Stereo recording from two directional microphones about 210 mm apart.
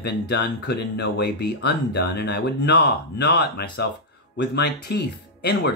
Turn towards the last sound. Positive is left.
turn(degrees=50)  # may be behind; listen again after turning